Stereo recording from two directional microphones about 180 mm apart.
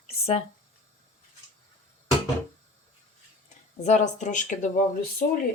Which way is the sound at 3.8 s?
40° left (ahead or behind).